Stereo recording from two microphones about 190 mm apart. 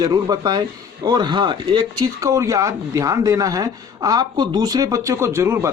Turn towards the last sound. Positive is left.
turn(degrees=-15)  # may be behind; listen again after turning